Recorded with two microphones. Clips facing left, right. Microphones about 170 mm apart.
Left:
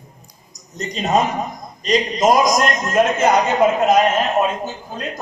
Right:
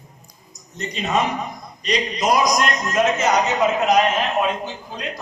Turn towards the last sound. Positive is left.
turn(degrees=45)  # may be behind; listen again after turning